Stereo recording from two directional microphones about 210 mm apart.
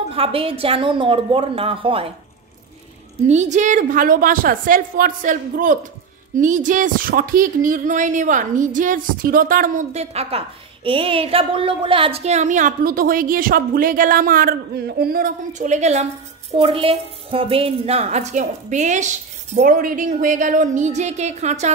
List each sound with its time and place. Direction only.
0.1 s a woman's voice: 25° right (ahead or behind)
3.3 s speech: 35° right (ahead or behind)